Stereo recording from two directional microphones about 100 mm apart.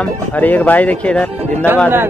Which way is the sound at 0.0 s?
15° left (ahead or behind).